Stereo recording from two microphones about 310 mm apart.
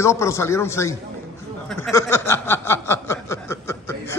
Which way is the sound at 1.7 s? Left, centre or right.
Centre.